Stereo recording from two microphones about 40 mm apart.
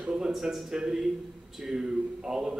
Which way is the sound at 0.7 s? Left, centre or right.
Centre.